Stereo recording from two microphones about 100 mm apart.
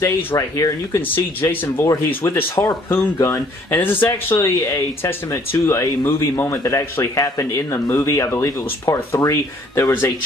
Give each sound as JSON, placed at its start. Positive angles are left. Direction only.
{"t": 0.0, "sound": "speech", "side_deg": 30}
{"t": 1.0, "sound": "speech", "side_deg": 20}